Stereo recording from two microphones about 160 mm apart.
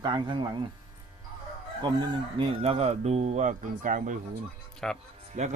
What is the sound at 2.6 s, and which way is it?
Speech, 40° right (ahead or behind).